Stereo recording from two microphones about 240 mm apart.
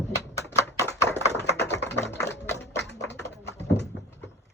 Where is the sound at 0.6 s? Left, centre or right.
Centre.